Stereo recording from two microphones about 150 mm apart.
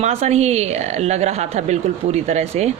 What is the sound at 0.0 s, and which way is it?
A woman's voice, 45° right (ahead or behind).